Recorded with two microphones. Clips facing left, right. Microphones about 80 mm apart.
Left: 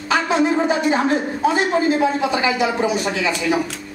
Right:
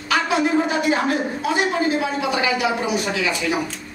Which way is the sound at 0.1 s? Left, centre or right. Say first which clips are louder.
Left 2 dB; left.